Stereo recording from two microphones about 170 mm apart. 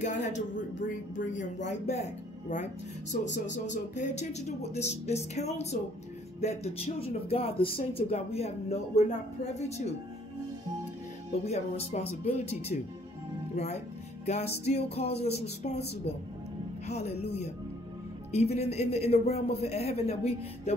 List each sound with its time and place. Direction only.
0.0 s speech: 45° left (ahead or behind)
3.1 s speech: 55° left (ahead or behind)
11.4 s speech: 40° left (ahead or behind)
14.2 s music: 40° left (ahead or behind)
15.0 s speech: 40° left (ahead or behind)
16.8 s speech: 40° left (ahead or behind)
18.3 s speech: 40° left (ahead or behind)